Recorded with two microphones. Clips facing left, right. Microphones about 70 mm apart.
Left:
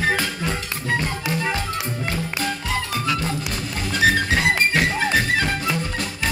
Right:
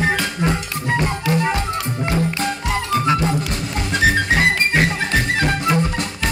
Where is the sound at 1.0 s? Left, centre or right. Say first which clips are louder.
Right 5 dB; right.